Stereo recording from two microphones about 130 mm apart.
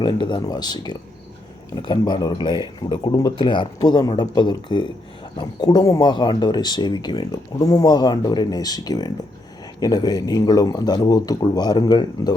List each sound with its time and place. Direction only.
0.0 s speech: 35° left (ahead or behind)